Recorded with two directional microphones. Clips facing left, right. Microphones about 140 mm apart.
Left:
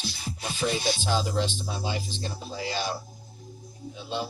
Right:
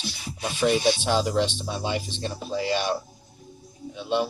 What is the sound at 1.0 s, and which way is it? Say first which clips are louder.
Speech: right 4 dB; 70° right (ahead or behind).